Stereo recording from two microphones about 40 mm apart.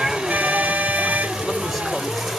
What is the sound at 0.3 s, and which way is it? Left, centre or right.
Music, right.